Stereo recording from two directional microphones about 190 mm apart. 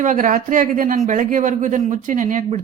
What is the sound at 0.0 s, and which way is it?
A woman's voice, 40° right (ahead or behind).